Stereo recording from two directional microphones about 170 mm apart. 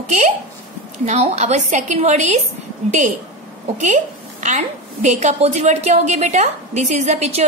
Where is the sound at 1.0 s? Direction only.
40° right (ahead or behind).